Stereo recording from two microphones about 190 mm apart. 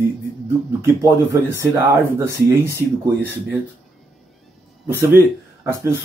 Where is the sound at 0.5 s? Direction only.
15° right (ahead or behind).